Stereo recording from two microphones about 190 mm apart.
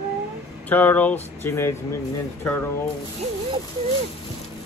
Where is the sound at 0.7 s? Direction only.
10° left (ahead or behind).